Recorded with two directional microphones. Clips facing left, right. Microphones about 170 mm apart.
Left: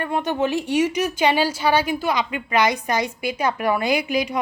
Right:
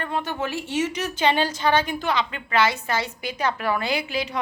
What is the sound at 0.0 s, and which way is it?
A woman's voice, 15° left (ahead or behind).